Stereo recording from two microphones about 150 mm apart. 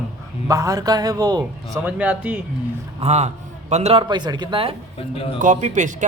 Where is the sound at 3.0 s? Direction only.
45° right (ahead or behind).